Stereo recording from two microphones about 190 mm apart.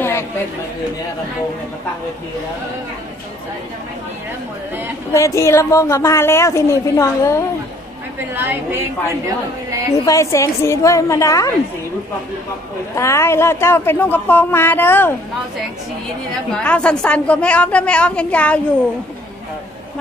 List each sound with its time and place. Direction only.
5.1 s a woman's voice: 15° left (ahead or behind)
8.4 s a woman's voice: 10° right (ahead or behind)
10.0 s a woman's voice: 15° left (ahead or behind)
12.9 s a woman's voice: 15° left (ahead or behind)
16.5 s a woman's voice: 5° left (ahead or behind)